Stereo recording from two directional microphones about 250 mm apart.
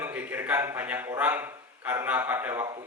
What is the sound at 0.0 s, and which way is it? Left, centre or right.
A man's voice, centre.